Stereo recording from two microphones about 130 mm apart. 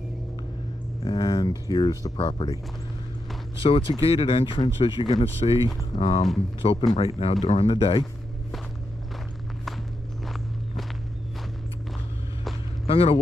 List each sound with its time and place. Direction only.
1.0 s speech: 35° left (ahead or behind)
3.6 s speech: 40° left (ahead or behind)
10.2 s walk: centre (ahead or behind)
12.8 s speech: 50° left (ahead or behind)